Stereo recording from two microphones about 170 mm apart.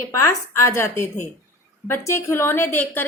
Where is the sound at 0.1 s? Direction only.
15° left (ahead or behind).